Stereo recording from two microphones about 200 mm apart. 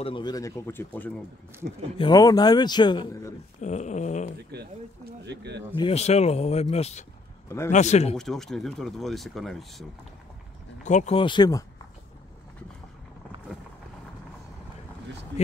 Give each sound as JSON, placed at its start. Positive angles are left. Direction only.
{"t": 0.0, "sound": "speech", "side_deg": 25}
{"t": 2.0, "sound": "a man's voice", "side_deg": 20}
{"t": 3.6, "sound": "speech", "side_deg": 35}
{"t": 4.5, "sound": "speech", "side_deg": -55}
{"t": 5.8, "sound": "speech", "side_deg": 30}
{"t": 7.4, "sound": "speech", "side_deg": 15}
{"t": 7.7, "sound": "speech", "side_deg": 35}
{"t": 8.2, "sound": "speech", "side_deg": 0}
{"t": 10.8, "sound": "a man's voice", "side_deg": 35}